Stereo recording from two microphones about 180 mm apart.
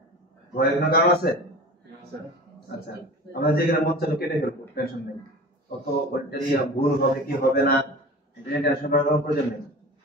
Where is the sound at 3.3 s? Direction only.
60° left (ahead or behind).